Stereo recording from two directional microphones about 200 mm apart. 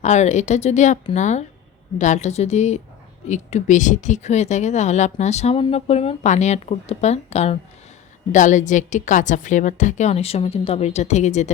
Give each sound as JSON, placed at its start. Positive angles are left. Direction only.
{"t": 0.0, "sound": "speech", "side_deg": 35}